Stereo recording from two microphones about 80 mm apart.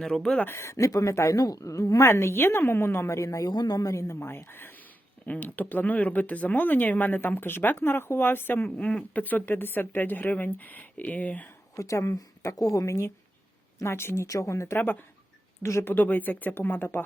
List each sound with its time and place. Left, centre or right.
0.0 s speech: centre
0.4 s a woman's voice: left
3.5 s a woman's voice: left; by 11.4 s centre
11.8 s a woman's voice: left
14.8 s speech: left
15.6 s a woman's voice: left
15.9 s speech: left